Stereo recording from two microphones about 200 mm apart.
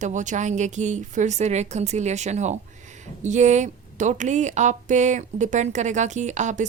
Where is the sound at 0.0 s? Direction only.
40° right (ahead or behind).